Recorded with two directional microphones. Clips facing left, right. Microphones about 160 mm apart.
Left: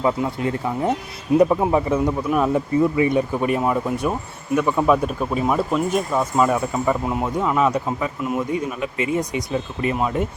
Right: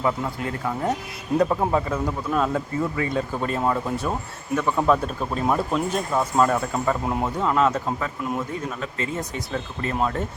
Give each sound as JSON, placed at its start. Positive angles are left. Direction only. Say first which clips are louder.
{"t": 0.0, "sound": "speech", "louder": "left 4 dB", "side_deg": 20}